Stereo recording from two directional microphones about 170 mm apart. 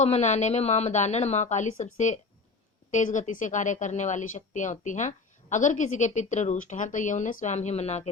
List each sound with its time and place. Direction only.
0.0 s a woman's voice: 40° left (ahead or behind)